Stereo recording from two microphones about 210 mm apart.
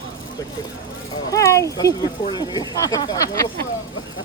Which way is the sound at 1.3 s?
15° left (ahead or behind).